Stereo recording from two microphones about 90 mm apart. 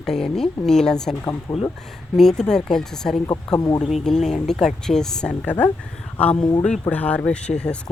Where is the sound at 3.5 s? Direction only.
45° left (ahead or behind).